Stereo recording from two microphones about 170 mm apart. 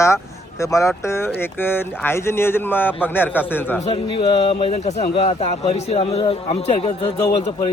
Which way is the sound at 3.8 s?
30° left (ahead or behind).